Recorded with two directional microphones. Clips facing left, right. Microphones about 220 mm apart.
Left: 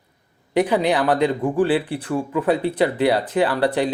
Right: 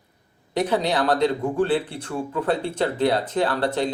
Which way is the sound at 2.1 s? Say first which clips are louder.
Left 4 dB; 10° left (ahead or behind).